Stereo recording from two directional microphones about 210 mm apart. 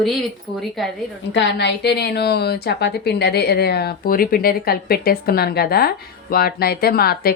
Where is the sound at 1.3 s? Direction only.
55° left (ahead or behind).